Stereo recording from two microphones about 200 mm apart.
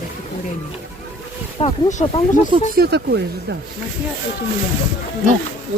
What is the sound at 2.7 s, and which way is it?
Speech, 55° right (ahead or behind).